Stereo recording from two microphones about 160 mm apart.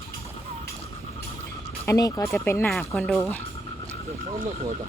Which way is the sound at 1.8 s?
20° left (ahead or behind).